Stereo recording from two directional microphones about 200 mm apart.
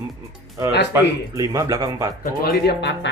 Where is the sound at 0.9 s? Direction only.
15° right (ahead or behind).